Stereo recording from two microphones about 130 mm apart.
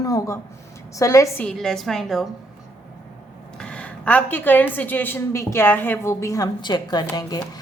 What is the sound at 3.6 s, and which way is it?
A woman's voice, 10° left (ahead or behind).